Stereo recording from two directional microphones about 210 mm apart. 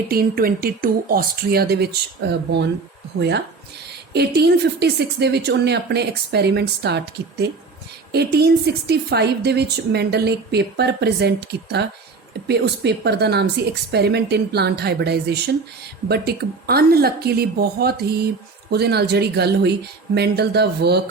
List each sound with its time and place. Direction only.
0.1 s a woman's voice: 45° right (ahead or behind)